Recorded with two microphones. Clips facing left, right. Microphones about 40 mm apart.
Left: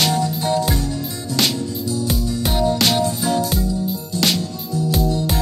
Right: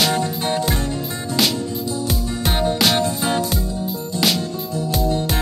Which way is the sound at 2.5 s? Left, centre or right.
Right.